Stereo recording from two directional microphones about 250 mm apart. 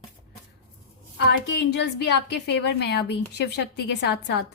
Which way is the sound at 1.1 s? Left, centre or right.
Left.